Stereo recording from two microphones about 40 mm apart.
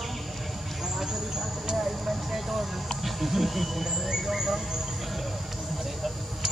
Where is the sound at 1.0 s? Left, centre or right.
Centre.